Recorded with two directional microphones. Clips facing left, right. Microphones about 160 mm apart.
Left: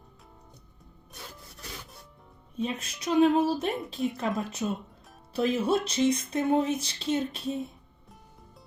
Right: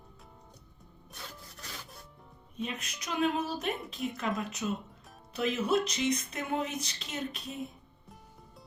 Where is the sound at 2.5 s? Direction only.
30° left (ahead or behind).